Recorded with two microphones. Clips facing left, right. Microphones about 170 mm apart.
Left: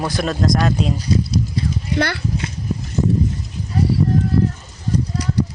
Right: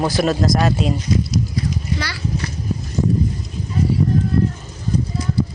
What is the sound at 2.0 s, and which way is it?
Speech, 60° left (ahead or behind).